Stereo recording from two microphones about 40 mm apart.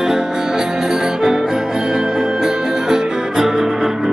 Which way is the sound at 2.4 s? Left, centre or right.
Centre.